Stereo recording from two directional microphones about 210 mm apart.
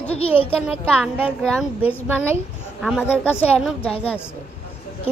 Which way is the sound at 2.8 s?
Centre (ahead or behind).